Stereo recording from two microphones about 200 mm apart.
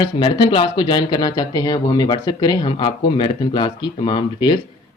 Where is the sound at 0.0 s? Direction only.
25° left (ahead or behind).